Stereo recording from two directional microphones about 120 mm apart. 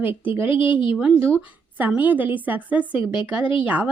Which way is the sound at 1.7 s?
15° right (ahead or behind).